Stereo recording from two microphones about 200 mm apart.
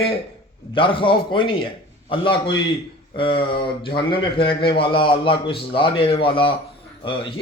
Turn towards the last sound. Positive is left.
turn(degrees=25)  # may be behind; listen again after turning